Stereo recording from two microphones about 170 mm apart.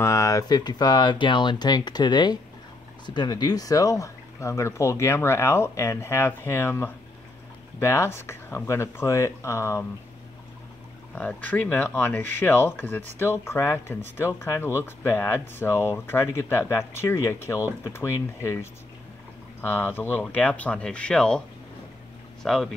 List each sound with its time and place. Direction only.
0.0 s speech: 20° left (ahead or behind)
11.1 s speech: 10° left (ahead or behind)
22.4 s speech: centre (ahead or behind)